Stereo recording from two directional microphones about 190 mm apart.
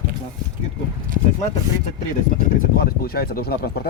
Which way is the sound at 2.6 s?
50° left (ahead or behind).